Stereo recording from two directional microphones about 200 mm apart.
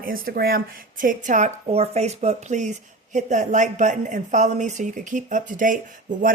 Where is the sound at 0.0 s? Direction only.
45° right (ahead or behind).